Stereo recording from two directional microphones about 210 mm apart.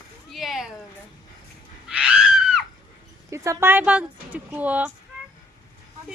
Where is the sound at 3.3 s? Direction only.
15° right (ahead or behind).